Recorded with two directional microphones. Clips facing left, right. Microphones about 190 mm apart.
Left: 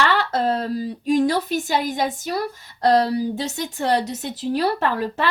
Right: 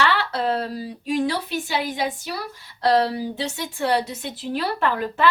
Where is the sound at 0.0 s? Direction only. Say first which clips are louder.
Left 2 dB; 45° left (ahead or behind).